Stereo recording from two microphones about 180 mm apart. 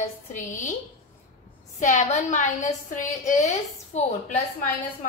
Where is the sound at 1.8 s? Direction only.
45° left (ahead or behind).